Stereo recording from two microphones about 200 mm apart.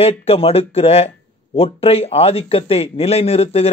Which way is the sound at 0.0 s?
30° left (ahead or behind).